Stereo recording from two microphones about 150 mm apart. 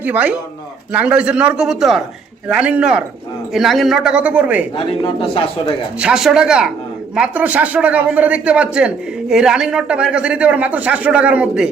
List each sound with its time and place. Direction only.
0.0 s speech: 10° right (ahead or behind)
4.8 s speech: 40° left (ahead or behind)
6.0 s speech: 5° right (ahead or behind)